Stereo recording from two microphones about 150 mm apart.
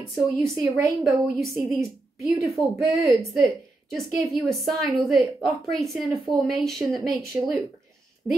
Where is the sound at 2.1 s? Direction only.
Centre (ahead or behind).